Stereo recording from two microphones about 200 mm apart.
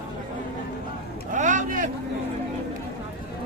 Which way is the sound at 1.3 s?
40° right (ahead or behind).